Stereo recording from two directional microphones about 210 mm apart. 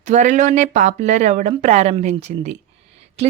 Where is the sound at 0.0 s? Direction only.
35° right (ahead or behind).